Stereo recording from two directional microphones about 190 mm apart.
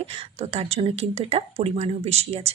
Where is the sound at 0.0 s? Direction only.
35° right (ahead or behind).